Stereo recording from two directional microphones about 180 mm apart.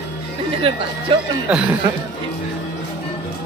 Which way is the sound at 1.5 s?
5° right (ahead or behind).